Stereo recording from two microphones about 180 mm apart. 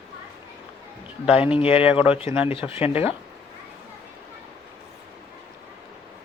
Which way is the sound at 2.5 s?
30° left (ahead or behind).